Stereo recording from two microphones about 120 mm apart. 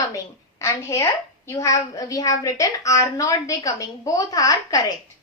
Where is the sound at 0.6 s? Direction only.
25° left (ahead or behind).